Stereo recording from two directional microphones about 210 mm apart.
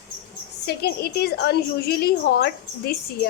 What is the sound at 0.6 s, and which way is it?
A woman's voice, 50° left (ahead or behind).